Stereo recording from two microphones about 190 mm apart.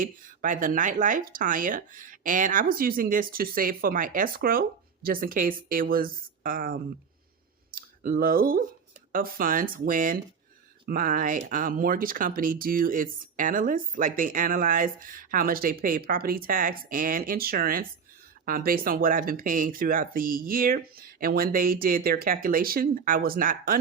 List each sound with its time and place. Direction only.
0.0 s speech: 45° right (ahead or behind)